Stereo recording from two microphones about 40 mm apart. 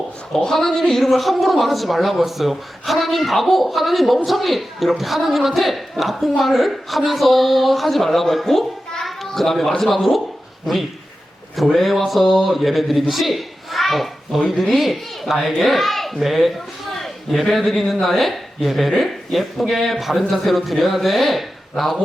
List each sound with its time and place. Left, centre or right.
0.3 s a woman's voice: centre
11.7 s a woman's voice: centre